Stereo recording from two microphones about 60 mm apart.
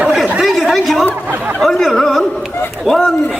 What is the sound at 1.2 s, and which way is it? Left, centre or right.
Speech, right.